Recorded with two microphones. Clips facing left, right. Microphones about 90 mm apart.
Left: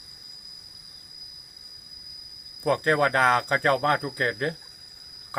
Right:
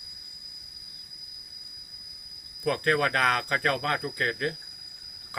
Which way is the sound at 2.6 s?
25° left (ahead or behind).